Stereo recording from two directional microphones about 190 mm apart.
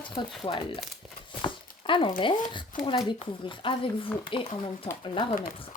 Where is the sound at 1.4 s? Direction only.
25° left (ahead or behind).